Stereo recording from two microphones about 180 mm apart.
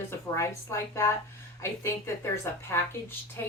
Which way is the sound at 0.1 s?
15° left (ahead or behind).